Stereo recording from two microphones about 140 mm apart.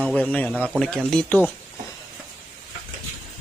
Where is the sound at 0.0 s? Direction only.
10° left (ahead or behind).